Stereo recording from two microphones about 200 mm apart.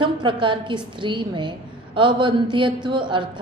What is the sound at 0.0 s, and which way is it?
A woman's voice, 25° right (ahead or behind).